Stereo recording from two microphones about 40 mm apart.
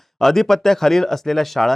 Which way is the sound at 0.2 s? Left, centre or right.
Centre.